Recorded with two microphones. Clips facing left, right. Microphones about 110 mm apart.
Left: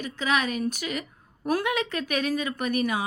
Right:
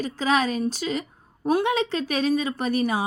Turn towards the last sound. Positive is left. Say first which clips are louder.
# right 2 dB
turn(degrees=-30)  # may be behind; listen again after turning